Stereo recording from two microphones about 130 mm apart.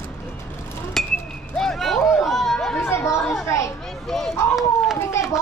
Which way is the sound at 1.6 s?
5° left (ahead or behind).